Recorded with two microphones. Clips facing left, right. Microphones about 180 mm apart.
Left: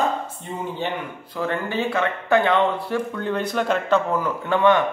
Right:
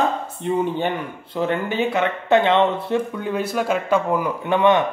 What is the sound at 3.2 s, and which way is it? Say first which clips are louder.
A man's voice: right 1 dB; 10° right (ahead or behind).